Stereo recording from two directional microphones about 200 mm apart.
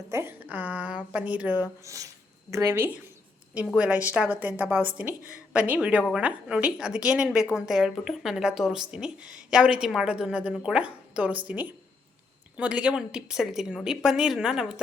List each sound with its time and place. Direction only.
0.1 s a woman's voice: 10° right (ahead or behind)